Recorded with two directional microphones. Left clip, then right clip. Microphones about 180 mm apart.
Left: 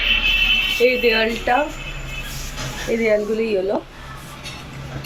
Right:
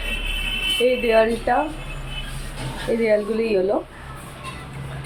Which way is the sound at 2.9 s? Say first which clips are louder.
Left 1 dB; 5° right (ahead or behind).